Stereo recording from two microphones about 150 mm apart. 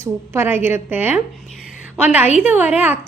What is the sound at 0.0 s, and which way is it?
A woman's voice, 15° right (ahead or behind).